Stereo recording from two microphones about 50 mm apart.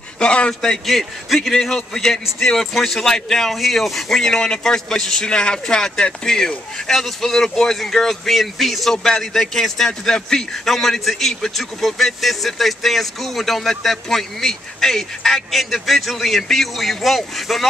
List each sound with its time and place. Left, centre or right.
0.2 s a man's voice: centre
0.6 s speech: centre
8.9 s a man's voice: centre